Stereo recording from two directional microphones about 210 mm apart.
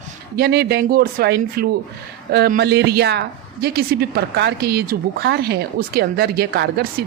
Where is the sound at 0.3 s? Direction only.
50° right (ahead or behind).